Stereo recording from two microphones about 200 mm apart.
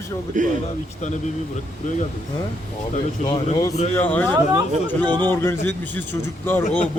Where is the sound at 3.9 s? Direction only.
10° left (ahead or behind).